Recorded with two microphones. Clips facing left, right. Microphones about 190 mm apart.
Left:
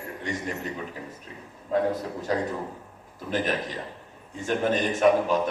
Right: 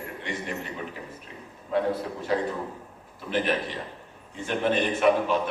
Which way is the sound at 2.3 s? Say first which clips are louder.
Right 1 dB; 45° left (ahead or behind).